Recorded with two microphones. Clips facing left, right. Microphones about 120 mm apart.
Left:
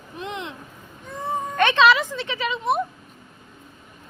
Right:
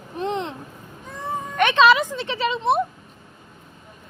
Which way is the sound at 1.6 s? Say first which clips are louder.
Right 1 dB; 15° right (ahead or behind).